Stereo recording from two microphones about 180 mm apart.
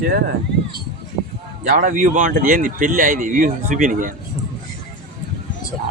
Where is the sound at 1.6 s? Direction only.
45° right (ahead or behind).